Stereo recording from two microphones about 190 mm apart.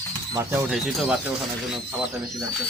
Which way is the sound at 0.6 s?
Centre (ahead or behind).